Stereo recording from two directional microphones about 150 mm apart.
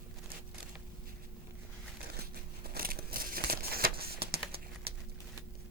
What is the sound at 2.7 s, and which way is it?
Crumpling, 75° right (ahead or behind).